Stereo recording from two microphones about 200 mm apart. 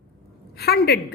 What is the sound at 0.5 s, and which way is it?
Speech, 55° left (ahead or behind).